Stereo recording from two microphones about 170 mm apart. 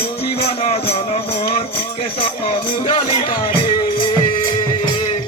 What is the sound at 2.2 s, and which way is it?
Music, 35° left (ahead or behind).